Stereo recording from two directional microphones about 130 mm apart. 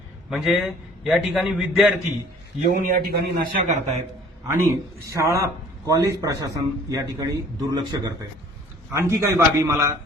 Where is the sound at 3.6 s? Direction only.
65° right (ahead or behind).